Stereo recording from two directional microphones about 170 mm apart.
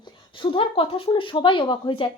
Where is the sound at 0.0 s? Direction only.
30° left (ahead or behind).